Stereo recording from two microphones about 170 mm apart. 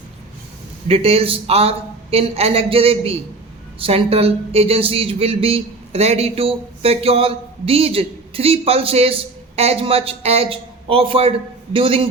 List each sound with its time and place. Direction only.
0.9 s speech: 35° right (ahead or behind)